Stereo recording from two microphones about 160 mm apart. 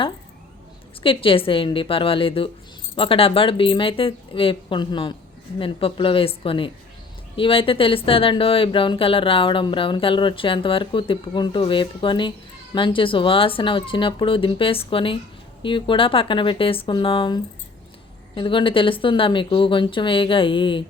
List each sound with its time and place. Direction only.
1.0 s speech: 35° left (ahead or behind)